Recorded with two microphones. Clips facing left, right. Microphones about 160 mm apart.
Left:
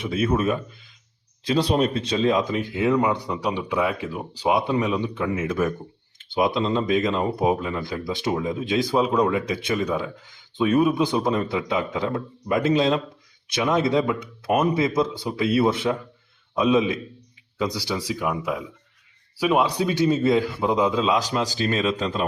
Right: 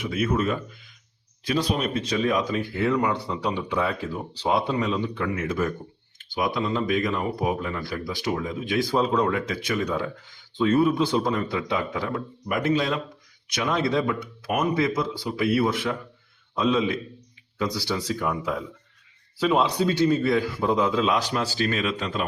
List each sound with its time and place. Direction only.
0.0 s speech: 25° left (ahead or behind)